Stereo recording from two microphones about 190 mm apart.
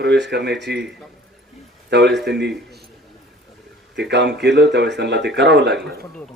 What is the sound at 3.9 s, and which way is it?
Speech, 65° right (ahead or behind).